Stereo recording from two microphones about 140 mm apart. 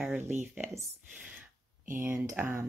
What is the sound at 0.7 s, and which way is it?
Speech, 20° right (ahead or behind).